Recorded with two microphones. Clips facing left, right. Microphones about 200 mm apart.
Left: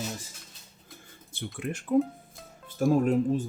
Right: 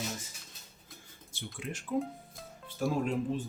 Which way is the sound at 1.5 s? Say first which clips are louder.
Left 8 dB; 55° left (ahead or behind).